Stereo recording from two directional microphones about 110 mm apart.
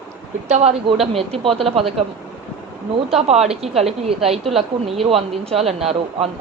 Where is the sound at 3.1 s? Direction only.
75° right (ahead or behind).